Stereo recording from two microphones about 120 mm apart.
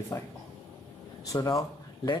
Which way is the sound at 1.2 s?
30° left (ahead or behind).